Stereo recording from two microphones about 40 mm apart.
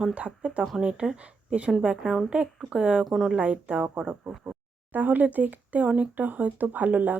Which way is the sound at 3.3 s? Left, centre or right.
Right.